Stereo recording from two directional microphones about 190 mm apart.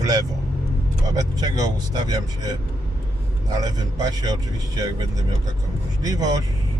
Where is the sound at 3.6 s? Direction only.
20° right (ahead or behind).